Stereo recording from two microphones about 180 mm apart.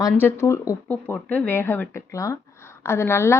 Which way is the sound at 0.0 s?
15° left (ahead or behind).